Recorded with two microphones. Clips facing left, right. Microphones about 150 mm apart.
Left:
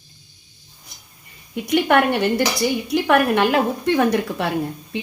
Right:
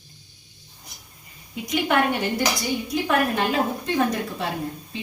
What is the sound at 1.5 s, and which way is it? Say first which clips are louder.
A woman's voice: left 5 dB; 65° left (ahead or behind).